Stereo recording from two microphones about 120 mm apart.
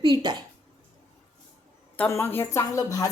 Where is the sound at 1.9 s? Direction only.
20° left (ahead or behind).